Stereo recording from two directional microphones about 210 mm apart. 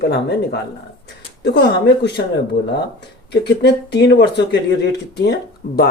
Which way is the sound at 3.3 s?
50° left (ahead or behind).